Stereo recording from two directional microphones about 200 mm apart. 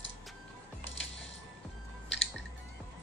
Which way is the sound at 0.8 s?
65° left (ahead or behind).